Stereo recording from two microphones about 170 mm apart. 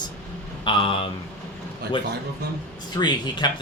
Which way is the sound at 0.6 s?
30° left (ahead or behind).